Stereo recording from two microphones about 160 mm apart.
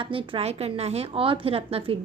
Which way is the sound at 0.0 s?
35° right (ahead or behind).